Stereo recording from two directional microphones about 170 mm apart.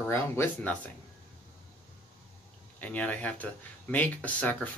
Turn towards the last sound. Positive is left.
turn(degrees=10)  # may be behind; listen again after turning